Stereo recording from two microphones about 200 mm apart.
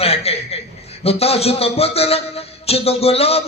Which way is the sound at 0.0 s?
30° left (ahead or behind).